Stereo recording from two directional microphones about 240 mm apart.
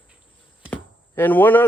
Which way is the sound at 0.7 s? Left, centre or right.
Centre.